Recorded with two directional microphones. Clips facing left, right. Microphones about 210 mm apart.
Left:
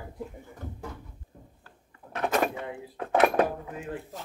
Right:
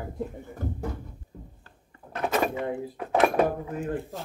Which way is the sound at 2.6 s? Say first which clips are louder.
Right 8 dB; 50° right (ahead or behind).